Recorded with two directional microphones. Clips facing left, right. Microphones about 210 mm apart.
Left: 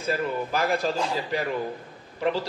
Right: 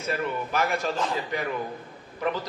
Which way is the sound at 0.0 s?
30° left (ahead or behind).